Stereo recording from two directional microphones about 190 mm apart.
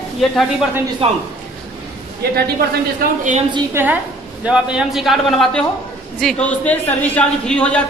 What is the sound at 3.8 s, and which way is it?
A woman's voice, 10° right (ahead or behind).